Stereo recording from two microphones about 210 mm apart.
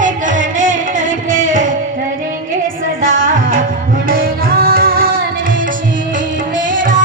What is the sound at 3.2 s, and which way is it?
Music, 40° right (ahead or behind).